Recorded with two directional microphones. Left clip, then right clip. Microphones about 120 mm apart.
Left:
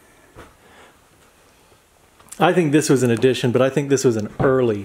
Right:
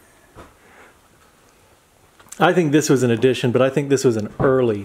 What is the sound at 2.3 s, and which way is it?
Speech, centre (ahead or behind).